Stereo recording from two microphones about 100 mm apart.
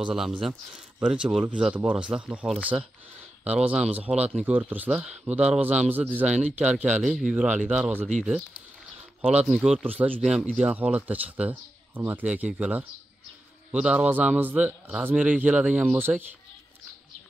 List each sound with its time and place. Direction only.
0.0 s a man's voice: 5° right (ahead or behind)
9.5 s speech: 5° right (ahead or behind)
9.8 s a man's voice: 15° right (ahead or behind)